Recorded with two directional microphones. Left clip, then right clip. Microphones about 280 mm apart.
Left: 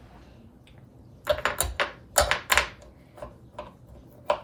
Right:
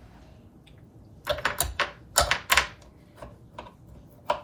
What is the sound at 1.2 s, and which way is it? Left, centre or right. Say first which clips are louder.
Typing: left 2 dB; centre.